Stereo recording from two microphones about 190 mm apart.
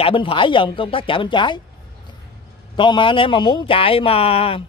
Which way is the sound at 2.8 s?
25° left (ahead or behind).